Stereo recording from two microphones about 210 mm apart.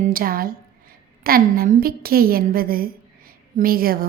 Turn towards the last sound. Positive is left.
turn(degrees=-45)  # may be behind; listen again after turning